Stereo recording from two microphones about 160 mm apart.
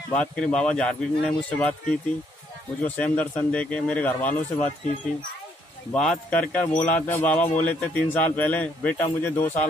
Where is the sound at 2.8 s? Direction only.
10° left (ahead or behind).